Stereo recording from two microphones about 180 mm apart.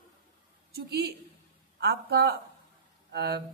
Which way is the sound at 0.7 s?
65° right (ahead or behind).